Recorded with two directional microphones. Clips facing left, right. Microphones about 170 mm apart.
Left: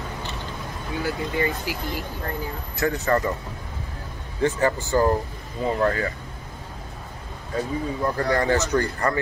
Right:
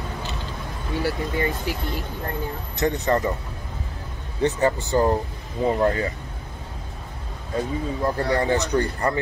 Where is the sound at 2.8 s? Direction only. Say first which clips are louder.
Right 1 dB; 20° right (ahead or behind).